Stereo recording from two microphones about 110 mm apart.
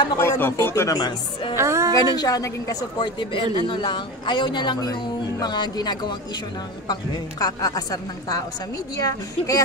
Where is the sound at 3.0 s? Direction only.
50° left (ahead or behind).